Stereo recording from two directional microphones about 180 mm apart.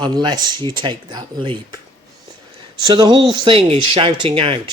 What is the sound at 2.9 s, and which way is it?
Speech, 25° right (ahead or behind).